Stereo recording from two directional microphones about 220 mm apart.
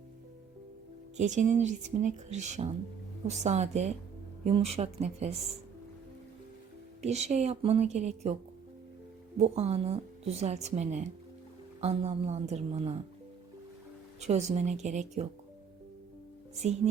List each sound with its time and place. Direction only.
1.1 s speech: 35° right (ahead or behind)
7.0 s speech: 30° right (ahead or behind)
9.4 s speech: 30° right (ahead or behind)
14.2 s speech: 30° right (ahead or behind)
16.6 s speech: 30° right (ahead or behind)